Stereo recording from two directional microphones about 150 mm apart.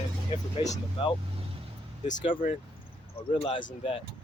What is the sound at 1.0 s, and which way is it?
Speech, 35° left (ahead or behind).